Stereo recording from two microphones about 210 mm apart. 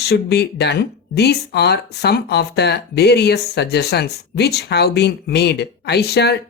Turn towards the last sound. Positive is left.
turn(degrees=50)  # may be behind; listen again after turning